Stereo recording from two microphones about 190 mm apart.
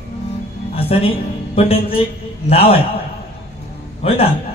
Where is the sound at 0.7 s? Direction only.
30° left (ahead or behind).